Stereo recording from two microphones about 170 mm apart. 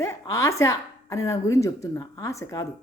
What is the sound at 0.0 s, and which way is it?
A woman's voice, 20° left (ahead or behind).